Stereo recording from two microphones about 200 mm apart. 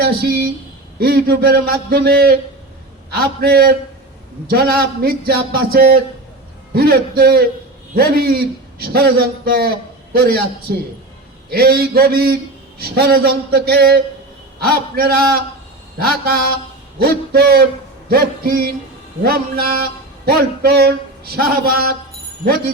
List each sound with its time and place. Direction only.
0.0 s a man's voice: 55° right (ahead or behind)
16.2 s a man's voice: 50° right (ahead or behind)